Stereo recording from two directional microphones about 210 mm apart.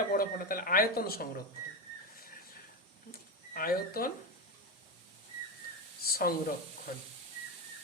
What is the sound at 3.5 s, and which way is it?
Speech, 45° left (ahead or behind).